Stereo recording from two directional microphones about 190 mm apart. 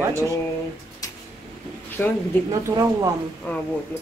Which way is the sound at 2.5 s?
20° right (ahead or behind).